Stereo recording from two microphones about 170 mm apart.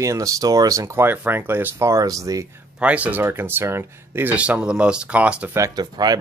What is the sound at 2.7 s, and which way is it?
Speech, 10° right (ahead or behind).